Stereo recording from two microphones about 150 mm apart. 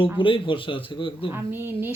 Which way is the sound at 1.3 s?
15° right (ahead or behind).